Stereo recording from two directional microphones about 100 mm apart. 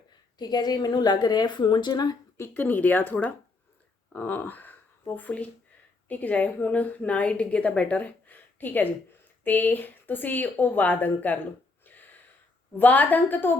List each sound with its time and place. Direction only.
0.3 s a woman's voice: 45° left (ahead or behind)
2.4 s a woman's voice: 20° left (ahead or behind)
12.7 s speech: 15° left (ahead or behind)